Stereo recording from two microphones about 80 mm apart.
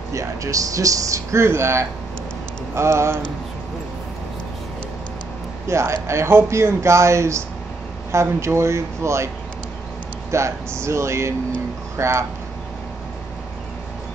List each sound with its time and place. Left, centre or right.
0.1 s speech: right
5.7 s speech: right
10.3 s speech: right